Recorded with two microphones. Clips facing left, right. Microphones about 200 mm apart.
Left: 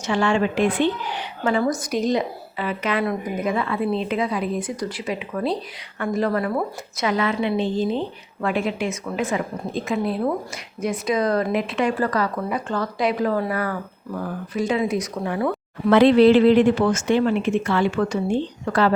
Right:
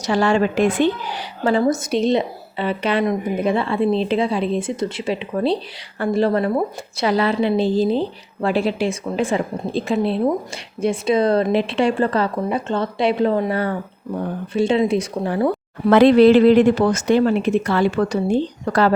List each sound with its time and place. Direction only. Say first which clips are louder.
0.0 s a woman's voice: right 3 dB; 35° right (ahead or behind)
15.9 s a woman's voice: right 2 dB; 45° right (ahead or behind)